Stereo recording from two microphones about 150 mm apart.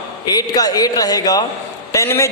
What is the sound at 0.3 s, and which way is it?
A man's voice, 25° left (ahead or behind).